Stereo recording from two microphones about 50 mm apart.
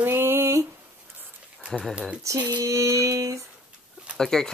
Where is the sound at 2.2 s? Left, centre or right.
Right.